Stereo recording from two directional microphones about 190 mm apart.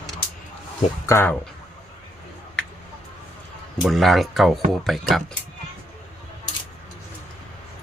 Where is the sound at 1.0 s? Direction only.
15° left (ahead or behind).